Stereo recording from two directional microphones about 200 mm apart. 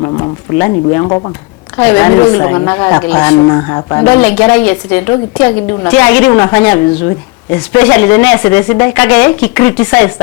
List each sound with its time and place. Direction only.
0.0 s a woman's voice: 20° left (ahead or behind)